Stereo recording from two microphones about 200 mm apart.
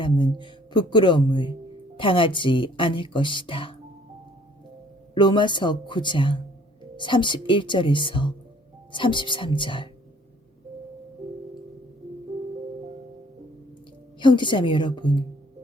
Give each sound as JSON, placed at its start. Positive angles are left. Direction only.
{"t": 0.0, "sound": "speech", "side_deg": 25}
{"t": 5.1, "sound": "speech", "side_deg": 25}
{"t": 14.2, "sound": "speech", "side_deg": 25}